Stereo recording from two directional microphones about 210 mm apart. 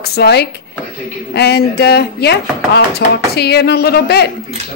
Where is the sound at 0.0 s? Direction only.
50° left (ahead or behind).